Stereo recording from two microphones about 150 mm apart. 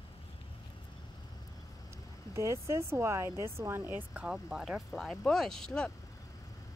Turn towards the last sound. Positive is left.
turn(degrees=5)  # may be behind; listen again after turning